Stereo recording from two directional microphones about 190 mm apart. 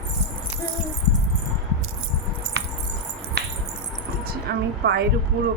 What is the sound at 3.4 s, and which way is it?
Finger snapping, 60° right (ahead or behind).